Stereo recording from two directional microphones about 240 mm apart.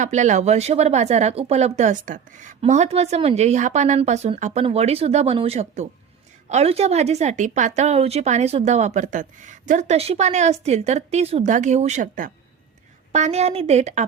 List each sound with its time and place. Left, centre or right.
0.0 s speech: right